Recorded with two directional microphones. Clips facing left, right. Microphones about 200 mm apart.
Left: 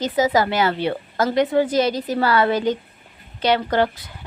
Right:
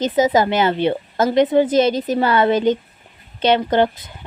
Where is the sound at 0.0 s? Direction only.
20° right (ahead or behind).